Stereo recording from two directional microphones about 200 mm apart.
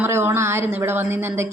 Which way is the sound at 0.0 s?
10° right (ahead or behind).